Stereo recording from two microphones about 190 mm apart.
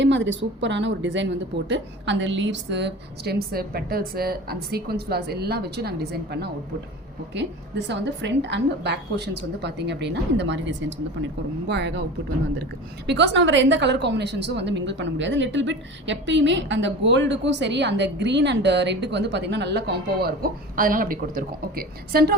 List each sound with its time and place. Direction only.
0.0 s a woman's voice: 70° right (ahead or behind)
13.1 s a woman's voice: 65° right (ahead or behind)